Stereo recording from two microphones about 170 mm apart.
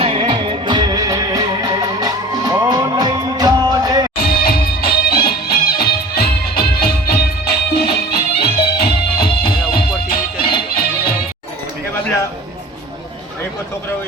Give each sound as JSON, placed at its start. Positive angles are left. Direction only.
{"t": 0.0, "sound": "music", "side_deg": -30}
{"t": 4.2, "sound": "music", "side_deg": 60}